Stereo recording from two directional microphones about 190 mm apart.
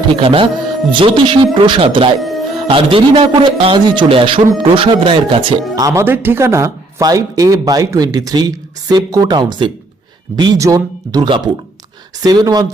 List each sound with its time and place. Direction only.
0.1 s a man's voice: 25° right (ahead or behind)